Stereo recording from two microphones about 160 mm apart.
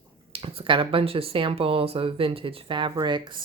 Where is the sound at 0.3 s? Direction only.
35° right (ahead or behind).